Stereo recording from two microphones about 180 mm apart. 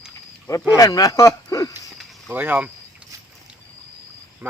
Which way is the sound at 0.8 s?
20° left (ahead or behind).